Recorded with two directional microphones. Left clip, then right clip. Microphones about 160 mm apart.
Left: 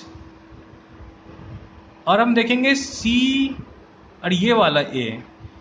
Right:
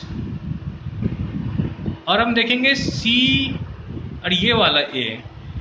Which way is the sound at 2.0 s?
60° left (ahead or behind).